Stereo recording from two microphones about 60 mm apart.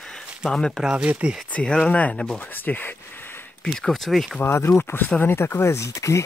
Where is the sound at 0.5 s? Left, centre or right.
Centre.